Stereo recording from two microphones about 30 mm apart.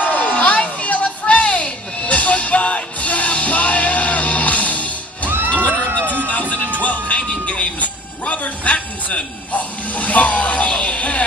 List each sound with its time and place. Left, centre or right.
0.0 s music: left
7.2 s music: left
8.3 s television: left
10.7 s music: left